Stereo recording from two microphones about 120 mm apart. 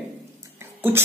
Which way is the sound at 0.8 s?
15° right (ahead or behind).